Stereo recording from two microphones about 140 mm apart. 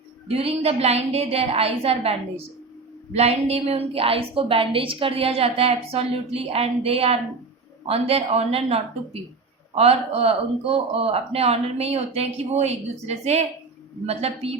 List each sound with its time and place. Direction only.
0.3 s a woman's voice: 45° right (ahead or behind)